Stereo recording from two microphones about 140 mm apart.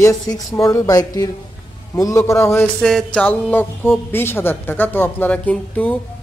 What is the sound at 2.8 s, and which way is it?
Speech, 5° left (ahead or behind).